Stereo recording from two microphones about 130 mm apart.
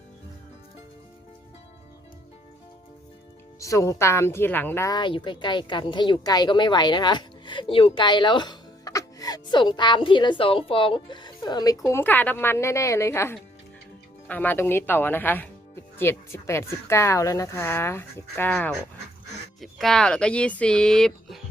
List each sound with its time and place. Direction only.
3.6 s a woman's voice: 25° left (ahead or behind)
4.9 s speech: 35° left (ahead or behind); by 18.5 s 15° left (ahead or behind)
18.5 s speech: 5° left (ahead or behind)